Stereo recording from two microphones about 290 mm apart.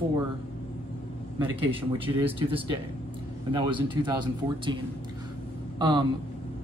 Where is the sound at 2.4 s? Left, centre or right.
Centre.